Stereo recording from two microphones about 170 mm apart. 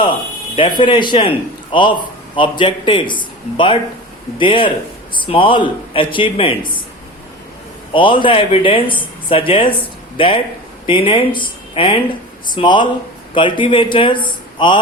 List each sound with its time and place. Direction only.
0.5 s a man's voice: 30° left (ahead or behind)
7.9 s a man's voice: 30° left (ahead or behind)
14.3 s a sound: 30° left (ahead or behind)